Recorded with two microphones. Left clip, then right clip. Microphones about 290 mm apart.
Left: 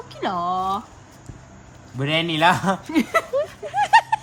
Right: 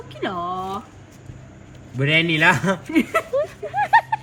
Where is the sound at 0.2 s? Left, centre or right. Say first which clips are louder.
Left 3 dB; left.